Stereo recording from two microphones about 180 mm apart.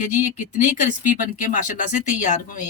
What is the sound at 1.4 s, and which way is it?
Speech, 45° left (ahead or behind).